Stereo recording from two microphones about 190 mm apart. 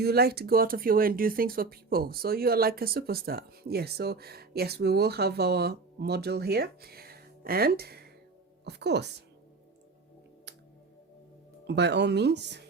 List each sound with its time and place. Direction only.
0.0 s speech: 55° right (ahead or behind)
11.6 s speech: 60° right (ahead or behind)